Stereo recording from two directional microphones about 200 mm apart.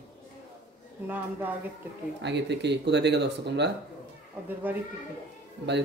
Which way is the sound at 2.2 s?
60° right (ahead or behind).